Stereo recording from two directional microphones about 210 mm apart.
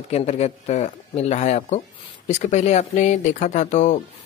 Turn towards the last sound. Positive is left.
turn(degrees=35)  # may be behind; listen again after turning